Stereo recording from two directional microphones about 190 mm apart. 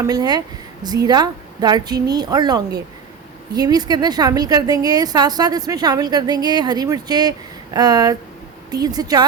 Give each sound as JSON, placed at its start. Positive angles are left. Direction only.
{"t": 0.0, "sound": "a woman's voice", "side_deg": -20}